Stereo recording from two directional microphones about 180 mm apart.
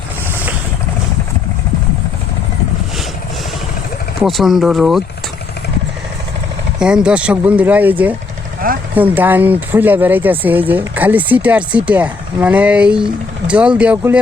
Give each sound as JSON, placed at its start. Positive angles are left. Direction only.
{"t": 4.2, "sound": "speech", "side_deg": 0}
{"t": 6.7, "sound": "speech", "side_deg": -5}
{"t": 8.6, "sound": "speech", "side_deg": -50}
{"t": 9.0, "sound": "speech", "side_deg": -10}